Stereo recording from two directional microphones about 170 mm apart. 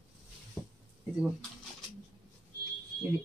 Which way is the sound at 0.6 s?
Centre (ahead or behind).